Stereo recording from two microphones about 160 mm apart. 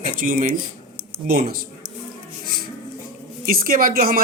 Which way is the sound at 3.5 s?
65° right (ahead or behind).